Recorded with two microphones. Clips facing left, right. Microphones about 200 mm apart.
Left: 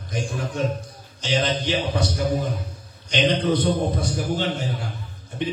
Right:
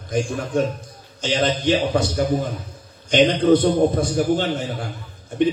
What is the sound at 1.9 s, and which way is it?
Speech, 50° right (ahead or behind).